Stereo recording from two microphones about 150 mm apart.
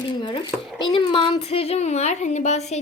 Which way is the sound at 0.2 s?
30° left (ahead or behind).